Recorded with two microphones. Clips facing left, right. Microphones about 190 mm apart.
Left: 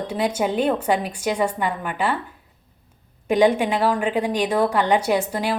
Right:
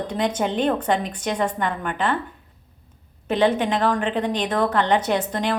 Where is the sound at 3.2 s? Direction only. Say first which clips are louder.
Left 2 dB; 10° left (ahead or behind).